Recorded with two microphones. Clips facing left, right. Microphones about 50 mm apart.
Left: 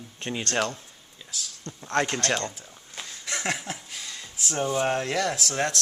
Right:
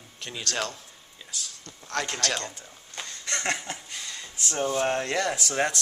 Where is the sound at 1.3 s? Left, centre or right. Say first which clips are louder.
Left 1 dB; centre.